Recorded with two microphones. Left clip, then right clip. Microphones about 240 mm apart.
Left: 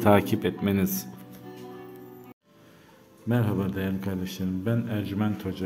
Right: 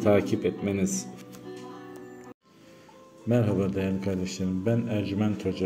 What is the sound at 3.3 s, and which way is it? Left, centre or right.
A man's voice, centre.